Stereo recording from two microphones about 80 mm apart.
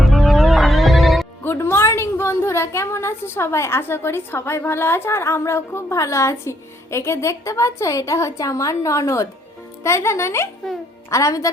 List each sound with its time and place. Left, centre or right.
0.0 s music: centre
1.5 s a woman's voice: left